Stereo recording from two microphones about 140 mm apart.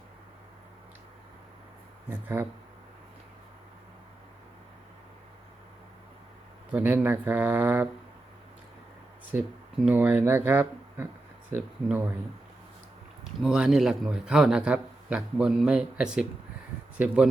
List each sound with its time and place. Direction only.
2.0 s speech: 15° right (ahead or behind)
6.7 s speech: 10° right (ahead or behind)
9.3 s speech: 10° right (ahead or behind)
13.4 s a man's voice: 5° right (ahead or behind)